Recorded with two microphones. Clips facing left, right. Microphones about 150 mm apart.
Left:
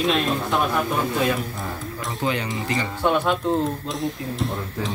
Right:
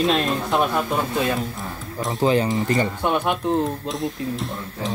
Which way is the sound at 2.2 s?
35° right (ahead or behind).